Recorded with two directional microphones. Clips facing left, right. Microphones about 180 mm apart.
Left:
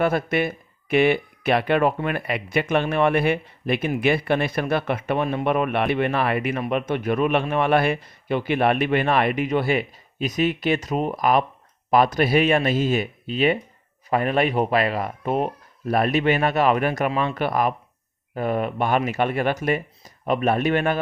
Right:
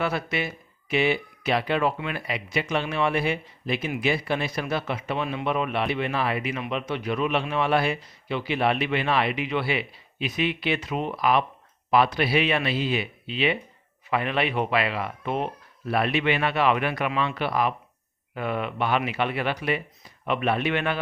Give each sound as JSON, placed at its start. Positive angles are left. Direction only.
{"t": 0.0, "sound": "a man's voice", "side_deg": 50}